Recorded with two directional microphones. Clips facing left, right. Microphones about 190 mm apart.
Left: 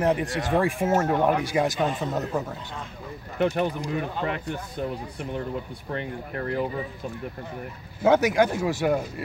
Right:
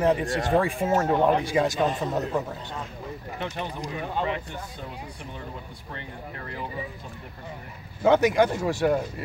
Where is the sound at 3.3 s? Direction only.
55° left (ahead or behind).